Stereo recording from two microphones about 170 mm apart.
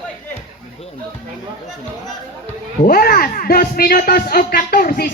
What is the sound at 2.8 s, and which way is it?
Speech, 60° left (ahead or behind).